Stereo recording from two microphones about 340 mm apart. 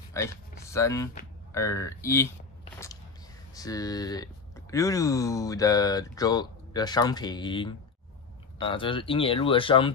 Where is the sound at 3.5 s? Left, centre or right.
Centre.